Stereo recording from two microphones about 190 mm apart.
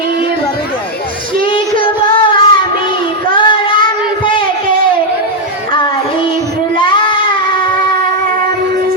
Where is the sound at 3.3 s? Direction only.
25° left (ahead or behind).